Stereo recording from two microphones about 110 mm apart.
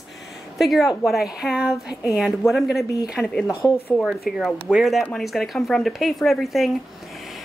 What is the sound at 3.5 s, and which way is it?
Speech, 25° left (ahead or behind).